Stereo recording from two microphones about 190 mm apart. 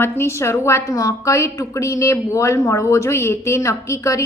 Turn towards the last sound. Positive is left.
turn(degrees=15)  # may be behind; listen again after turning